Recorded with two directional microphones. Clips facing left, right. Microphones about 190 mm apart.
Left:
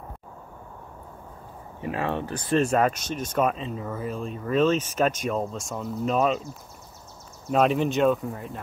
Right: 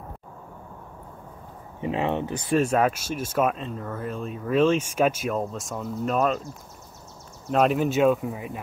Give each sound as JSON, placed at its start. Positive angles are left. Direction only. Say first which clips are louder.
{"t": 1.8, "sound": "speech", "louder": "right 3 dB", "side_deg": -20}
{"t": 2.5, "sound": "speech", "louder": "even", "side_deg": -5}
{"t": 7.5, "sound": "speech", "louder": "right 1 dB", "side_deg": 0}